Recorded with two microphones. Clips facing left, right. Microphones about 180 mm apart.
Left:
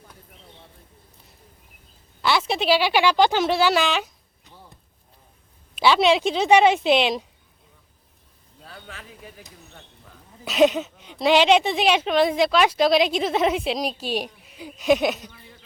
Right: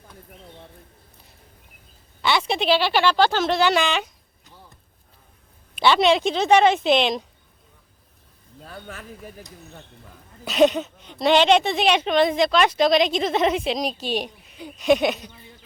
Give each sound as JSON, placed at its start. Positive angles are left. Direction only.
{"t": 2.2, "sound": "speech", "side_deg": 0}
{"t": 5.8, "sound": "a woman's voice", "side_deg": 5}
{"t": 8.6, "sound": "speech", "side_deg": -45}
{"t": 10.4, "sound": "a woman's voice", "side_deg": 5}